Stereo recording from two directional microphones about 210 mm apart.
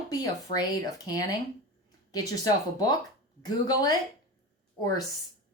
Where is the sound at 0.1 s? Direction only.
20° left (ahead or behind).